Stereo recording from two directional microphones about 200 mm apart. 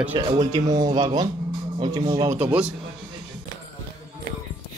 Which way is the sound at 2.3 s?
10° right (ahead or behind).